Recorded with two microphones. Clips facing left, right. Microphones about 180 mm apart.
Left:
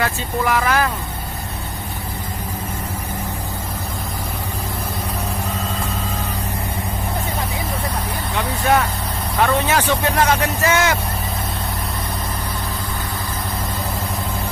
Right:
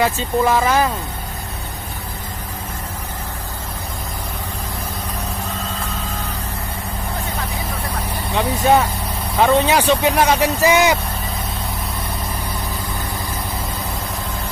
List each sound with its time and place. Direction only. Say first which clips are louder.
0.0 s speech: right 4 dB; 20° right (ahead or behind)
8.4 s speech: right 3 dB; 15° right (ahead or behind)